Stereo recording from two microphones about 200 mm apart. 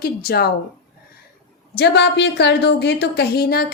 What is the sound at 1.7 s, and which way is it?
A woman's voice, 55° left (ahead or behind).